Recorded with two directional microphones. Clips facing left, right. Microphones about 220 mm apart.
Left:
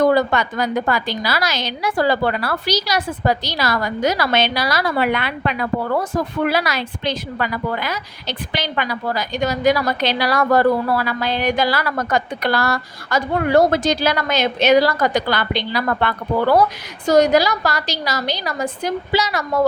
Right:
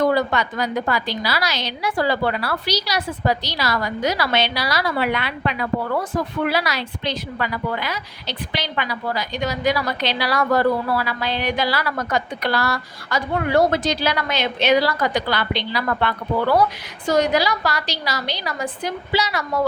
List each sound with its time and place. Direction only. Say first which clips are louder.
0.1 s a woman's voice: left 3 dB; 50° left (ahead or behind)